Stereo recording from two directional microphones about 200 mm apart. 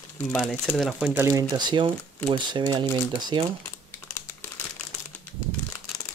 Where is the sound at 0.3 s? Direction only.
5° left (ahead or behind); by 3.4 s 25° right (ahead or behind).